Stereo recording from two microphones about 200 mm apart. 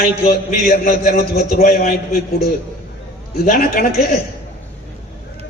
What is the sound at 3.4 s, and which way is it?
Speech, 45° left (ahead or behind).